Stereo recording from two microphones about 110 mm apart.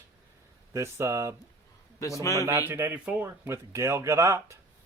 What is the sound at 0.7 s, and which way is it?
Speech, 25° right (ahead or behind).